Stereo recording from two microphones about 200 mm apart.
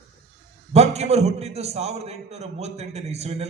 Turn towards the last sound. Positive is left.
turn(degrees=-30)  # may be behind; listen again after turning